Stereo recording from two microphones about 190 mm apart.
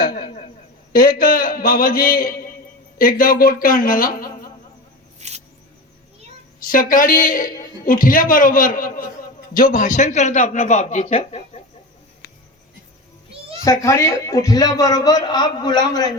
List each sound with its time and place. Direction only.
0.9 s a man's voice: 50° left (ahead or behind)
5.2 s mouse: 35° right (ahead or behind)
6.7 s a man's voice: 45° left (ahead or behind)
12.2 s a sound: 60° left (ahead or behind)
13.7 s a man's voice: 15° left (ahead or behind)